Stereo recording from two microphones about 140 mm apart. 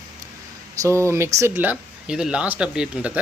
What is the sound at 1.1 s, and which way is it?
Speech, 20° right (ahead or behind).